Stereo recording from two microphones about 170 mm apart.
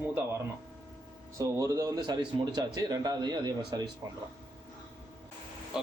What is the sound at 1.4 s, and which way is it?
Speech, 20° right (ahead or behind).